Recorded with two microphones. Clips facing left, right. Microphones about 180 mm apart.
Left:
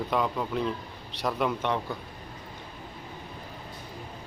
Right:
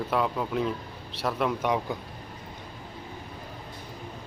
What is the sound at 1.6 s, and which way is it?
Speech, 10° right (ahead or behind).